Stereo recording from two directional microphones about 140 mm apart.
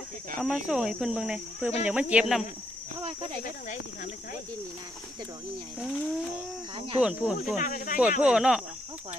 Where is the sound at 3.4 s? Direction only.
70° left (ahead or behind).